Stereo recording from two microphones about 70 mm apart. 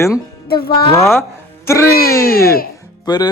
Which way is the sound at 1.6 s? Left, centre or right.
Left.